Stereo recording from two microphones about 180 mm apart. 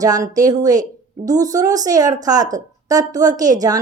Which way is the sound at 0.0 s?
20° right (ahead or behind).